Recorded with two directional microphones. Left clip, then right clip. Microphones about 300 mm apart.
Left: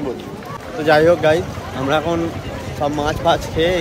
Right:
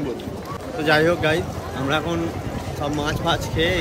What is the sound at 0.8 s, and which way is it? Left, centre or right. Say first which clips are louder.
Speech: left 6 dB; centre.